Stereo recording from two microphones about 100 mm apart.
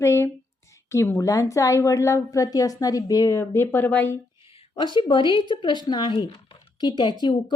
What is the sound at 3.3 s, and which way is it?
Speech, 25° left (ahead or behind).